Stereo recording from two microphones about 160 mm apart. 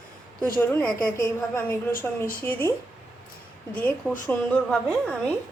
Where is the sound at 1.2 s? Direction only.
15° left (ahead or behind).